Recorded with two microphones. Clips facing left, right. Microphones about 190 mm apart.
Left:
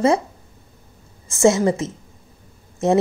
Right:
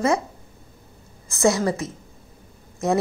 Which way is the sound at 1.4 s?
25° left (ahead or behind).